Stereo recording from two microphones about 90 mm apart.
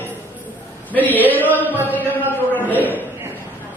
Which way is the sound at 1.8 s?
25° left (ahead or behind).